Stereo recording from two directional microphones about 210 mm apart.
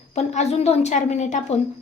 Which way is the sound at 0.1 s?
30° left (ahead or behind).